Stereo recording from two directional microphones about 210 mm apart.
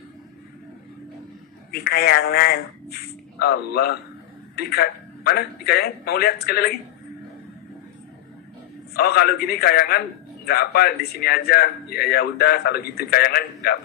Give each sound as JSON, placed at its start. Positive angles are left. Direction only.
{"t": 1.7, "sound": "a man's voice", "side_deg": 45}
{"t": 8.9, "sound": "a man's voice", "side_deg": 50}